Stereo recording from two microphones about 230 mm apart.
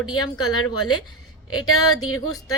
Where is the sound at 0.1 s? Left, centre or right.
Left.